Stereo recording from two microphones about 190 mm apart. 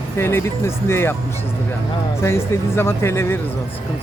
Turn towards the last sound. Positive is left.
turn(degrees=15)  # may be behind; listen again after turning